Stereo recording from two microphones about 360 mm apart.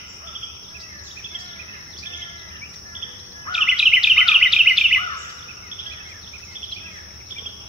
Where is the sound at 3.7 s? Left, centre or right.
Centre.